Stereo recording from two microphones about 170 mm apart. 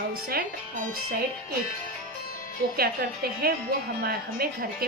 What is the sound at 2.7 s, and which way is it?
Speech, 65° right (ahead or behind).